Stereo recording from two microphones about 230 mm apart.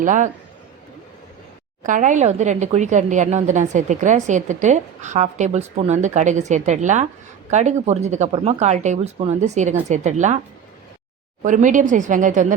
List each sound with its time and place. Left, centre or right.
0.0 s speech: right
1.8 s speech: right
11.4 s speech: right